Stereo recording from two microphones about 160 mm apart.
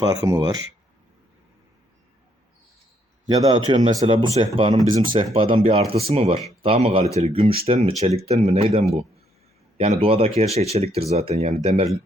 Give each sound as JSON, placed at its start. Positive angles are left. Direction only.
{"t": 0.0, "sound": "a man's voice", "side_deg": -20}
{"t": 3.2, "sound": "a man's voice", "side_deg": -25}